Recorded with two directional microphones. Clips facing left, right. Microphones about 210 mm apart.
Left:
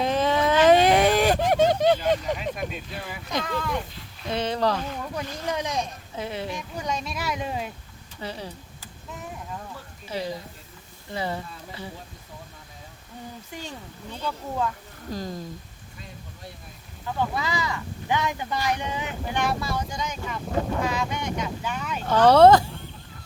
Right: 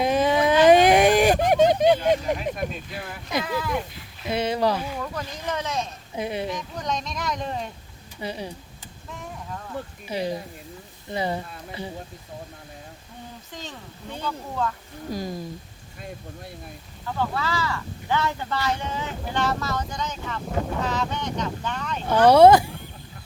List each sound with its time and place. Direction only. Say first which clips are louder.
0.0 s a sound: right 2 dB; 10° right (ahead or behind)
2.0 s speech: right 2 dB; 5° right (ahead or behind)
5.5 s speech: even; 15° left (ahead or behind)
6.1 s speech: right 4 dB; 15° right (ahead or behind)
6.5 s speech: right 1 dB; 10° left (ahead or behind)
8.2 s speech: right 3 dB; 15° right (ahead or behind)
9.7 s speech: right 10 dB; 60° right (ahead or behind)
10.1 s speech: right 3 dB; 15° right (ahead or behind)
13.5 s speech: left 1 dB; 10° left (ahead or behind)
15.1 s speech: right 2 dB; 10° right (ahead or behind)
17.2 s speech: right 1 dB; 15° left (ahead or behind)
22.0 s speech: right 1 dB; 10° right (ahead or behind)